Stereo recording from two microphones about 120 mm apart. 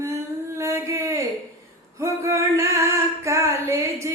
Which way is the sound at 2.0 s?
25° right (ahead or behind).